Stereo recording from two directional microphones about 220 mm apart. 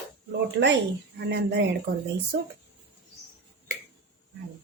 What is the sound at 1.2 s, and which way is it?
Speech, 50° right (ahead or behind).